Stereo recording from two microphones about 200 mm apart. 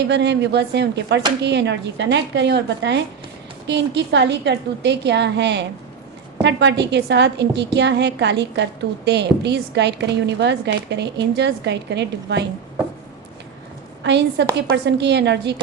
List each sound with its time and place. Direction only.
0.1 s a woman's voice: 60° right (ahead or behind)
14.0 s a woman's voice: 60° right (ahead or behind)